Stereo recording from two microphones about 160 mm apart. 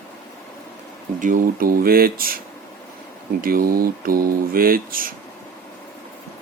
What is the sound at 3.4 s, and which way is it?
Speech, 65° right (ahead or behind).